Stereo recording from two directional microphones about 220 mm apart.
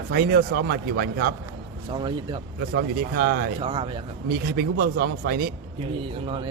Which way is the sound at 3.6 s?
25° right (ahead or behind).